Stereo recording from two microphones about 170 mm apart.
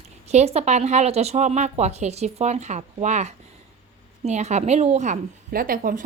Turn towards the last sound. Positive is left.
turn(degrees=-55)  # may be behind; listen again after turning